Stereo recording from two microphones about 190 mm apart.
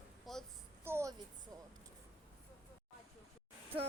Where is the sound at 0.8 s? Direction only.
15° right (ahead or behind).